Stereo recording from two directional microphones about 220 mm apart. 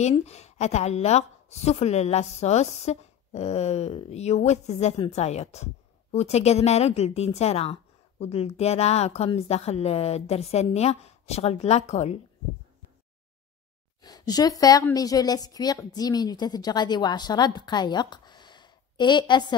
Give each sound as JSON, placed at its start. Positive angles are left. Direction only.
{"t": 0.0, "sound": "a woman's voice", "side_deg": 30}
{"t": 14.0, "sound": "a woman's voice", "side_deg": 15}
{"t": 17.6, "sound": "a sound", "side_deg": 20}